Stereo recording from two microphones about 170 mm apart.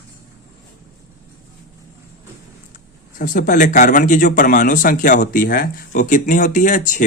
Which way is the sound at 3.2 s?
55° left (ahead or behind).